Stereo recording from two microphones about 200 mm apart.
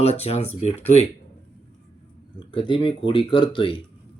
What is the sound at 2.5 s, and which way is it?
Speech, 25° left (ahead or behind).